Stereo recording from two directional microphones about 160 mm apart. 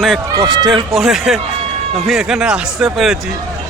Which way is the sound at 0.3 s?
20° right (ahead or behind).